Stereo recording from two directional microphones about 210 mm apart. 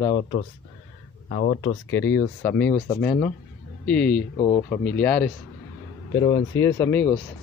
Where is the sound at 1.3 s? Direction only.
40° left (ahead or behind).